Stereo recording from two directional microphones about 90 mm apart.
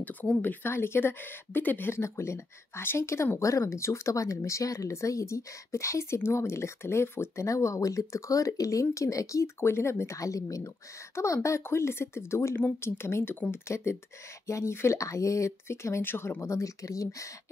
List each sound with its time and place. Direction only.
0.0 s speech: 20° left (ahead or behind); by 17.3 s 35° left (ahead or behind)